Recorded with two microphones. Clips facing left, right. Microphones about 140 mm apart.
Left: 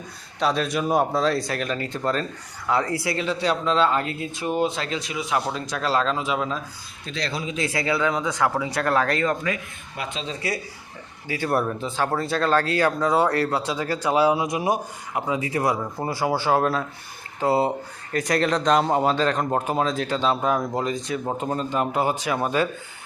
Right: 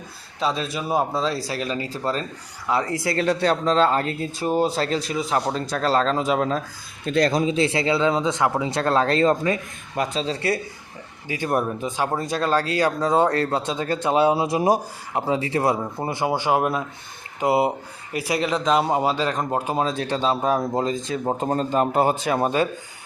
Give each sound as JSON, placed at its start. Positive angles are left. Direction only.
{"t": 0.3, "sound": "speech", "side_deg": 0}
{"t": 1.2, "sound": "speech", "side_deg": -30}
{"t": 2.7, "sound": "speech", "side_deg": -20}
{"t": 3.4, "sound": "speech", "side_deg": -40}
{"t": 11.3, "sound": "speech", "side_deg": -15}
{"t": 19.8, "sound": "speech", "side_deg": -25}
{"t": 22.4, "sound": "speech", "side_deg": -25}